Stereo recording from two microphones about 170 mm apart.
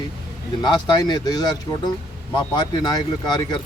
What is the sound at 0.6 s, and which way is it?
Speech, 25° left (ahead or behind).